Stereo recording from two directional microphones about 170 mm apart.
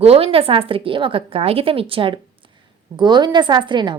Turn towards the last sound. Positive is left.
turn(degrees=-25)  # may be behind; listen again after turning